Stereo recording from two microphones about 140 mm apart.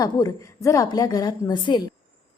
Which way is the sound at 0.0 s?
25° left (ahead or behind).